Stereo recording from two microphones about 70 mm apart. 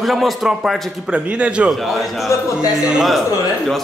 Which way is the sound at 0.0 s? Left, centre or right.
Centre.